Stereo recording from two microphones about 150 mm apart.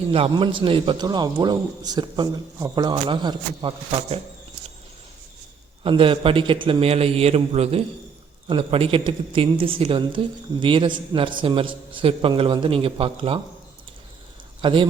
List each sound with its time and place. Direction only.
0.1 s a man's voice: 35° right (ahead or behind)
5.8 s a woman's voice: 35° right (ahead or behind)
14.6 s speech: 35° right (ahead or behind)